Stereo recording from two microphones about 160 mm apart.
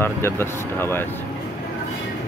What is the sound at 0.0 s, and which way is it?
Speech, 15° left (ahead or behind).